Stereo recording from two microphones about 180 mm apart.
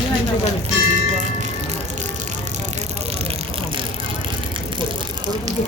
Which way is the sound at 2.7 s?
35° right (ahead or behind).